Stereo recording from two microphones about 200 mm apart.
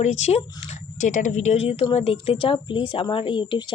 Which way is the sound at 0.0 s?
35° left (ahead or behind).